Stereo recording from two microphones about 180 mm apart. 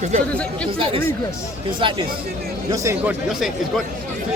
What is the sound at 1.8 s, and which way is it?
Speech, 30° right (ahead or behind).